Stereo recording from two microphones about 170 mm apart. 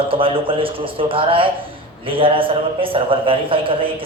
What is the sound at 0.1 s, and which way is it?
A man's voice, 30° right (ahead or behind).